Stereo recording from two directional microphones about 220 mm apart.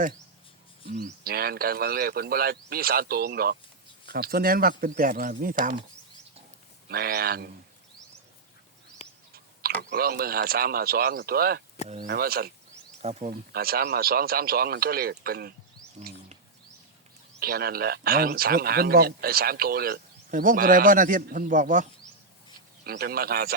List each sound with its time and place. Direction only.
0.9 s speech: 40° right (ahead or behind)
6.8 s speech: 45° right (ahead or behind)
9.3 s a sound: 45° right (ahead or behind)
9.9 s speech: 45° right (ahead or behind)
13.0 s speech: 30° right (ahead or behind)
13.5 s speech: 45° right (ahead or behind)
17.4 s speech: 45° right (ahead or behind)